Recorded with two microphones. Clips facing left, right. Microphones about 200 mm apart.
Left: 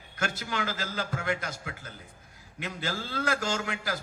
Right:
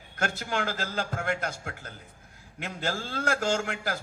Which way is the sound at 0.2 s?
50° right (ahead or behind).